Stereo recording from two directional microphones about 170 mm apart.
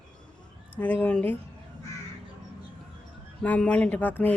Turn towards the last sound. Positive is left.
turn(degrees=10)  # may be behind; listen again after turning